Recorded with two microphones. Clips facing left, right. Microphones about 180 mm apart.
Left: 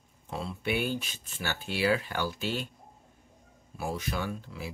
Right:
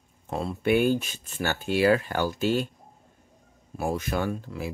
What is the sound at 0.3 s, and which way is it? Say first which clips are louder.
Speech: right 8 dB; 50° right (ahead or behind).